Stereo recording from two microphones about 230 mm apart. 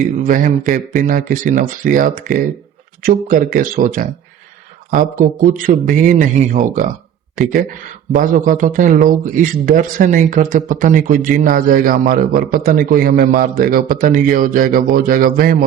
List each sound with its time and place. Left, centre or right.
0.2 s a man's voice: right